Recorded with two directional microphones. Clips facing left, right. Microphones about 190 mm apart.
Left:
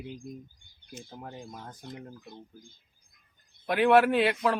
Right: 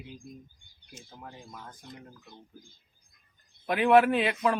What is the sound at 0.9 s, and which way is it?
Speech, 35° left (ahead or behind).